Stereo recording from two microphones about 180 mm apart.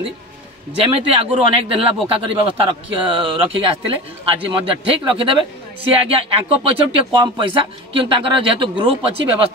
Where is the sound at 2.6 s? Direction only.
30° right (ahead or behind).